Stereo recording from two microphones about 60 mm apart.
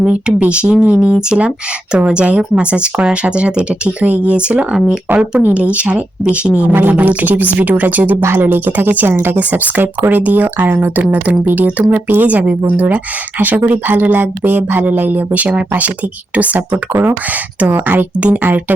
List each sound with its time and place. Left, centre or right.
0.0 s speech: centre
6.7 s speech: right
16.7 s speech: right